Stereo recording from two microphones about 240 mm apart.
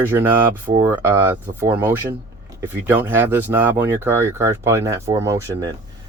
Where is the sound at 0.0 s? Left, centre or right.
Centre.